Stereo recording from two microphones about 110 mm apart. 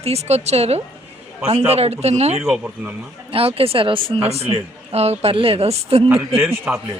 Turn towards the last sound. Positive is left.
turn(degrees=-20)  # may be behind; listen again after turning